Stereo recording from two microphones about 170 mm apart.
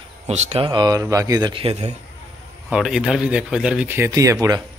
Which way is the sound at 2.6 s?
5° right (ahead or behind).